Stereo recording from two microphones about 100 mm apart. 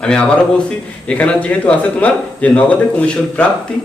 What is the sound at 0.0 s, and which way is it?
A man's voice, 10° left (ahead or behind).